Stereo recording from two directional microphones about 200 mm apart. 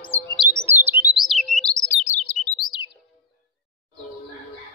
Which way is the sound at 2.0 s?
35° left (ahead or behind).